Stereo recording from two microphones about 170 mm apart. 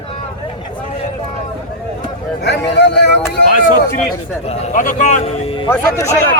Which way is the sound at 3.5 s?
55° left (ahead or behind).